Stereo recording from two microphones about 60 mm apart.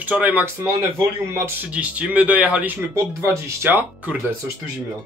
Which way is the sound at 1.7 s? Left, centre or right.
Right.